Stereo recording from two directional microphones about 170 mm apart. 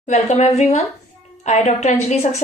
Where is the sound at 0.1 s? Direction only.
40° left (ahead or behind).